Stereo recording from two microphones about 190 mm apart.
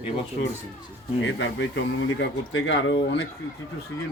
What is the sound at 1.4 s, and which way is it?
Speech, 75° left (ahead or behind).